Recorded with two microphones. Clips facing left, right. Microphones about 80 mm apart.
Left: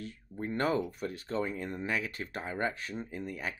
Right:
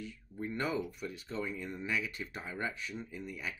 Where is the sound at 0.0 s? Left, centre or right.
Left.